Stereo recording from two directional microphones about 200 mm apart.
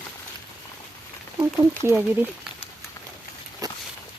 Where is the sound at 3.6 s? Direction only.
20° right (ahead or behind).